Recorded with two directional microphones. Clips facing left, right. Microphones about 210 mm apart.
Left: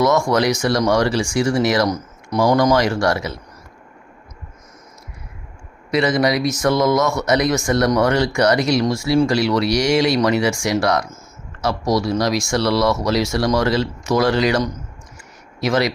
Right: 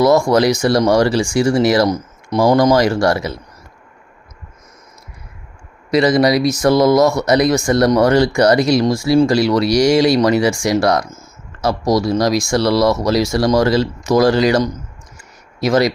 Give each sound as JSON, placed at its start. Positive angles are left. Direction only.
{"t": 0.0, "sound": "speech", "side_deg": -35}
{"t": 5.9, "sound": "speech", "side_deg": -35}